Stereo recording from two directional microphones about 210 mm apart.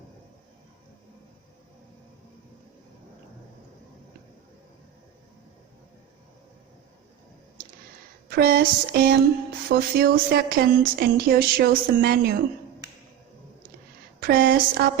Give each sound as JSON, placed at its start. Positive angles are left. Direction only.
{"t": 8.3, "sound": "speech", "side_deg": -45}
{"t": 14.2, "sound": "speech", "side_deg": -50}